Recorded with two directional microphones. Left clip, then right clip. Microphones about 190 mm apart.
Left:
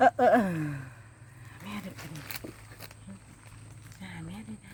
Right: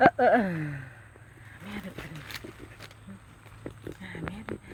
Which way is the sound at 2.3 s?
25° left (ahead or behind).